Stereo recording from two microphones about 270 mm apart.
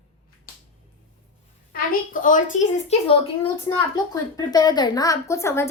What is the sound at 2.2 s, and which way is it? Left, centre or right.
A woman's voice, left.